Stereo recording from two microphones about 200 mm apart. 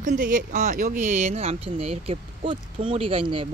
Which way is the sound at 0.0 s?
40° right (ahead or behind).